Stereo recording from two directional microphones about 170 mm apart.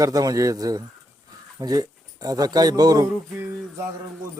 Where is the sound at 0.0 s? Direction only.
20° right (ahead or behind).